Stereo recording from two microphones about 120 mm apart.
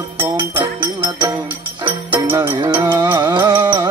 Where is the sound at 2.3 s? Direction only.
40° right (ahead or behind).